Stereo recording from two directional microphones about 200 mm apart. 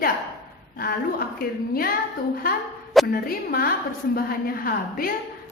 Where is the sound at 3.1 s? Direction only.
45° left (ahead or behind).